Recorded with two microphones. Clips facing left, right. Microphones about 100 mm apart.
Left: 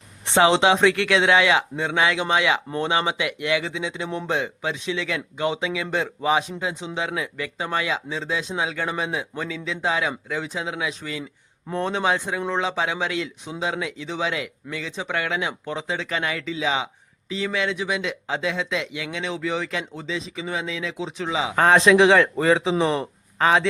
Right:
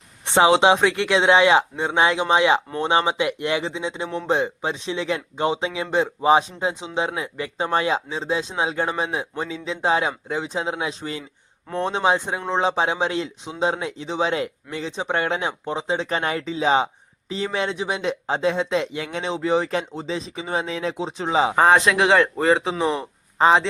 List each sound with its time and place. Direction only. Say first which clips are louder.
0.3 s speech: right 2 dB; 15° right (ahead or behind); by 21.5 s 40° right (ahead or behind)
21.5 s speech: left 3 dB; 10° right (ahead or behind)